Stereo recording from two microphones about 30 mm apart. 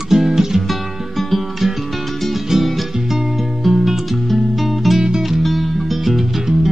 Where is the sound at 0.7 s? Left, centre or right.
Centre.